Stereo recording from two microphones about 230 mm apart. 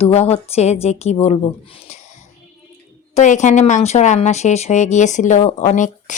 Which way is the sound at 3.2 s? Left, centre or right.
Left.